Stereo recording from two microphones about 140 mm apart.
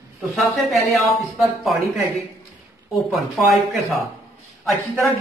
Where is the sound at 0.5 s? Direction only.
Centre (ahead or behind).